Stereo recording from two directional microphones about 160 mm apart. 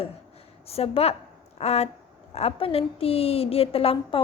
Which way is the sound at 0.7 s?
40° left (ahead or behind).